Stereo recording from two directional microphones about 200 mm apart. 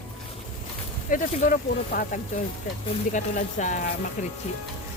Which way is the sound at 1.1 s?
45° left (ahead or behind).